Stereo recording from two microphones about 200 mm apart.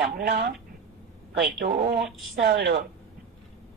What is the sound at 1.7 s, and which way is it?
Speech, 50° right (ahead or behind).